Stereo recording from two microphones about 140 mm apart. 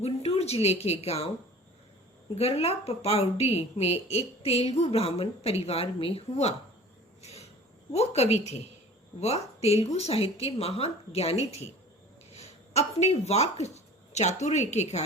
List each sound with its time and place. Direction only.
0.0 s a woman's voice: 50° left (ahead or behind)
2.3 s a woman's voice: 45° left (ahead or behind)
7.2 s a sound: 50° left (ahead or behind)
7.9 s a woman's voice: 50° left (ahead or behind)